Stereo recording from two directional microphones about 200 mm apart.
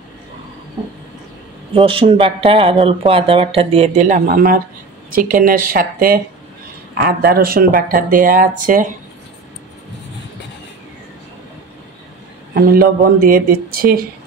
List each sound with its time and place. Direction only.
1.7 s speech: 25° right (ahead or behind); by 8.8 s 45° right (ahead or behind)
12.5 s speech: 45° right (ahead or behind)